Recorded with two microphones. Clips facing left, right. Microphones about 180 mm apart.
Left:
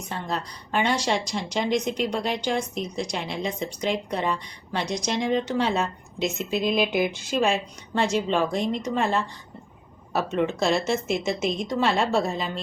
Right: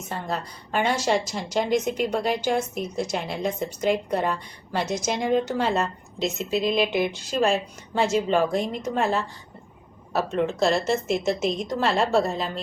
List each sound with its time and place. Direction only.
0.1 s a woman's voice: 5° right (ahead or behind)